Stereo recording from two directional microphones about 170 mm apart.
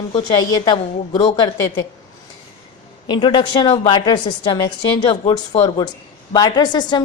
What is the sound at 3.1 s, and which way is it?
A woman's voice, 30° left (ahead or behind).